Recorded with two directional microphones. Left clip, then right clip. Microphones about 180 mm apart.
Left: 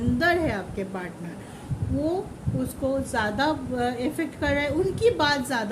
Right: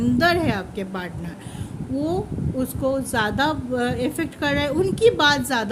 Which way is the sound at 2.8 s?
45° right (ahead or behind).